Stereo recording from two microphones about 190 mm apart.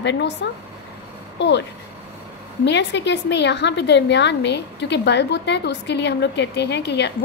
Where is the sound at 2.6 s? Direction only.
65° left (ahead or behind).